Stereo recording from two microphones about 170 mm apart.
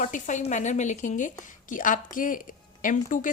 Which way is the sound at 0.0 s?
45° left (ahead or behind).